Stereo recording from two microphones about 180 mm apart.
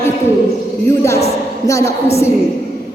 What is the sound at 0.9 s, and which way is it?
A woman's voice, 15° left (ahead or behind).